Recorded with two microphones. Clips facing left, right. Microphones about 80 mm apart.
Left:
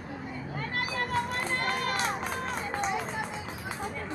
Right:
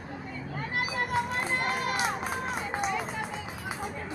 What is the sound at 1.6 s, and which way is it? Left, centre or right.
Run, centre.